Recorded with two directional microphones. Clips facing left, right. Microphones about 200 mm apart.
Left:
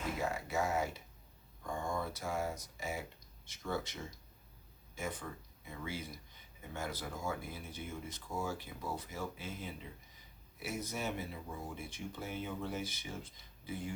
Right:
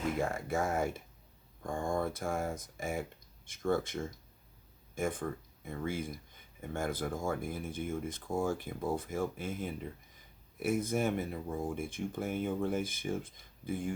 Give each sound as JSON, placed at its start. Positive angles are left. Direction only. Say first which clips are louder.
{"t": 0.2, "sound": "speech", "louder": "right 3 dB", "side_deg": -50}